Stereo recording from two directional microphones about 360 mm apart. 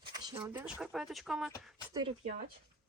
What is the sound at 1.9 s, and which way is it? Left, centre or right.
Speech, centre.